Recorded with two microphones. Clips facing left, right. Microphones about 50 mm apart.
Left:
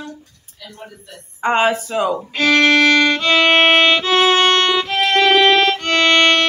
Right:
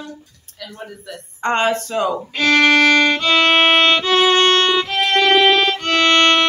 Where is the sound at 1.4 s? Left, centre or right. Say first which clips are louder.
Left 2 dB; centre.